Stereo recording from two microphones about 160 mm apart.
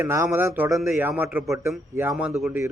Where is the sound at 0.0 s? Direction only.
15° right (ahead or behind).